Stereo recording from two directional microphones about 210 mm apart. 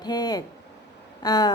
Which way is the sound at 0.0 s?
20° left (ahead or behind).